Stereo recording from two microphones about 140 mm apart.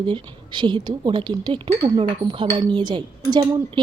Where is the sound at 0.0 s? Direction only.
35° right (ahead or behind).